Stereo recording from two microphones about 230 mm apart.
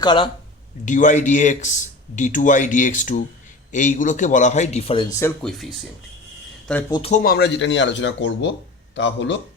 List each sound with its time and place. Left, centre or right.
0.0 s speech: centre
0.9 s speech: left
5.2 s speech: centre
6.9 s speech: left
7.2 s speech: left